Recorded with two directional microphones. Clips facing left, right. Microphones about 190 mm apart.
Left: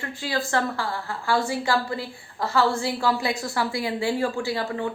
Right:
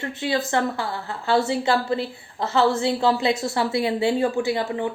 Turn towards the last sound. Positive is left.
turn(degrees=-20)  # may be behind; listen again after turning